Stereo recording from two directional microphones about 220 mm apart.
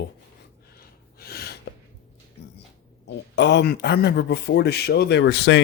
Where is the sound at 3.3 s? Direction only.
50° left (ahead or behind).